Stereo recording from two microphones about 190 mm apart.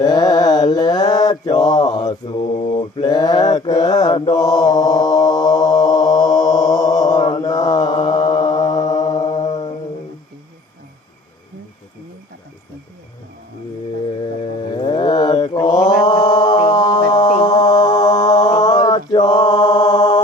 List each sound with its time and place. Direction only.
0.0 s mantra: 20° left (ahead or behind)
14.2 s mantra: 25° left (ahead or behind)